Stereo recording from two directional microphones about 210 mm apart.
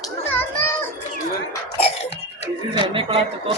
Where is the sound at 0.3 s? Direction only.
10° left (ahead or behind).